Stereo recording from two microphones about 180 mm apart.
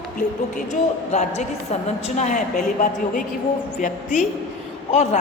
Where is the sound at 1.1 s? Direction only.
35° left (ahead or behind).